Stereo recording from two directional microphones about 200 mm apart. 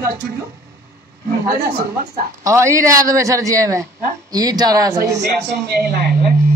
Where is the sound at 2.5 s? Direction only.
15° right (ahead or behind).